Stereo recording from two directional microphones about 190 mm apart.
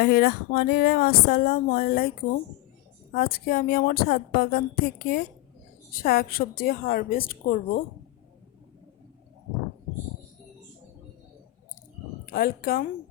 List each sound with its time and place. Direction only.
0.0 s speech: 55° left (ahead or behind)
3.2 s a woman's voice: 50° left (ahead or behind)
12.3 s a woman's voice: 50° left (ahead or behind)